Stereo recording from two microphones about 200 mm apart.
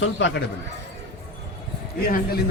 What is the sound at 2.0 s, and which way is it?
Speech, 50° left (ahead or behind).